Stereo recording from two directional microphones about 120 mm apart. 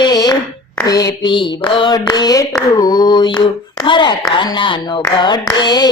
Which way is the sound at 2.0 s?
30° left (ahead or behind).